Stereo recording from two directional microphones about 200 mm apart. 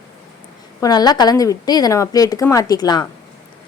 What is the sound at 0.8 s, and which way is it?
A woman's voice, 20° left (ahead or behind).